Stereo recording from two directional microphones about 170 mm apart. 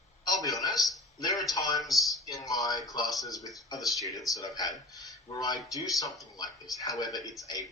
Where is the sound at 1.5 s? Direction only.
20° left (ahead or behind).